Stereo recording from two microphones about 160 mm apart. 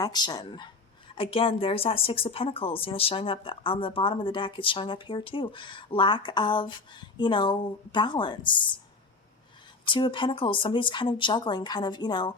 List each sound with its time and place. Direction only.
0.0 s a woman's voice: 25° left (ahead or behind)
9.8 s speech: 30° left (ahead or behind)